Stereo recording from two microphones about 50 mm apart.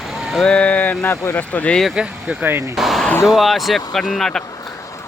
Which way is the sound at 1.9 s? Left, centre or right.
Centre.